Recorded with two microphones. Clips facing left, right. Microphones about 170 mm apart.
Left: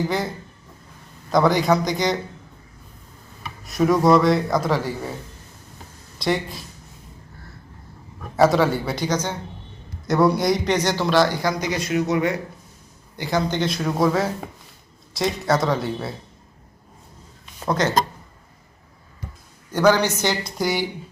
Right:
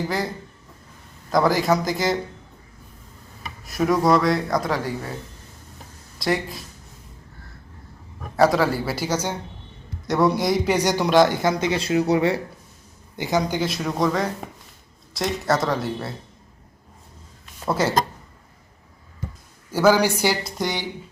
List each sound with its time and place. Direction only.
0.1 s speech: centre (ahead or behind)
3.6 s speech: centre (ahead or behind)
6.1 s speech: centre (ahead or behind)
8.4 s speech: centre (ahead or behind)
10.1 s a man's voice: centre (ahead or behind); by 12.4 s 30° right (ahead or behind)
13.1 s speech: 20° right (ahead or behind)
13.6 s speech: centre (ahead or behind)
17.7 s speech: 10° right (ahead or behind)
19.7 s speech: 10° right (ahead or behind)
20.6 s speech: 5° left (ahead or behind)